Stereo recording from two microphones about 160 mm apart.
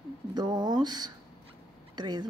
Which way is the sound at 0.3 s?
25° right (ahead or behind).